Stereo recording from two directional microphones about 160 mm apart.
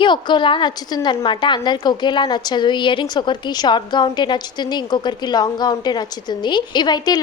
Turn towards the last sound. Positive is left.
turn(degrees=25)  # may be behind; listen again after turning